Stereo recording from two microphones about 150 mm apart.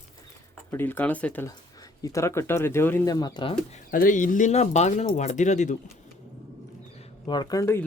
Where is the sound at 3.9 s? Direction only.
65° left (ahead or behind).